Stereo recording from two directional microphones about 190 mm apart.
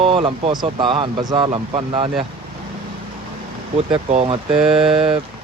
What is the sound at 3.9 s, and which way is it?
Speech, 30° right (ahead or behind).